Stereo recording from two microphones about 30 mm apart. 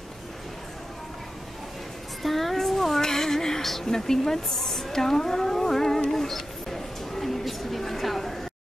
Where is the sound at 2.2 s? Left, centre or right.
Centre.